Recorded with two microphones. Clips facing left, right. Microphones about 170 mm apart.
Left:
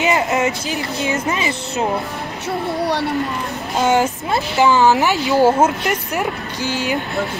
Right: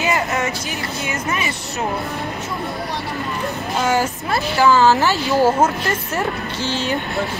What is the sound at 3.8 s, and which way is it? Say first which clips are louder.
A woman's voice: left 4 dB; 20° left (ahead or behind).